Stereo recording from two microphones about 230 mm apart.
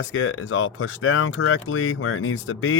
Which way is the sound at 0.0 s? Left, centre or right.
Left.